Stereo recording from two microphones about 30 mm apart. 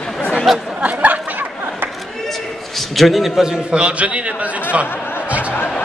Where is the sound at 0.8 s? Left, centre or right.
Right.